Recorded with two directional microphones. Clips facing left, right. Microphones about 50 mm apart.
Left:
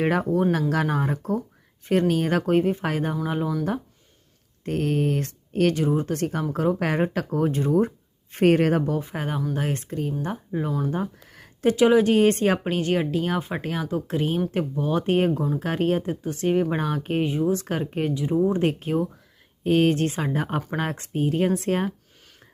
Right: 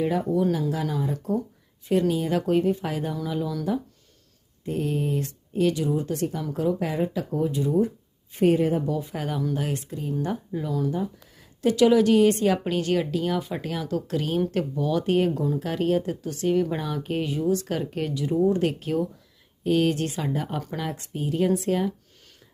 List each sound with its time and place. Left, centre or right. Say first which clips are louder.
0.0 s speech: left 2 dB; left
4.6 s speech: left 3 dB; left
6.7 s speech: left 3 dB; left
8.9 s speech: left 1 dB; left
10.2 s speech: left 1 dB; left
10.8 s speech: even; left
11.6 s speech: left 1 dB; left